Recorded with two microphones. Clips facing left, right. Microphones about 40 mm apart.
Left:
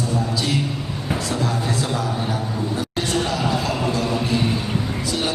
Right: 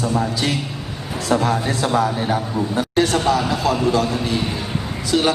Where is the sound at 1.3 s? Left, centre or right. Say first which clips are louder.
Right 8 dB; right.